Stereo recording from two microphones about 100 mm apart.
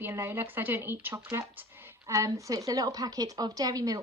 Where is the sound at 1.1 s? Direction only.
35° right (ahead or behind).